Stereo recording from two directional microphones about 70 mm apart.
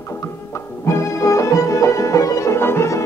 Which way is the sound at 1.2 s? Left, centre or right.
Left.